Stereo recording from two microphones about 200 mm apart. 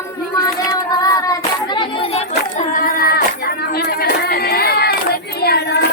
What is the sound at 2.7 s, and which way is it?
Cat, 45° left (ahead or behind).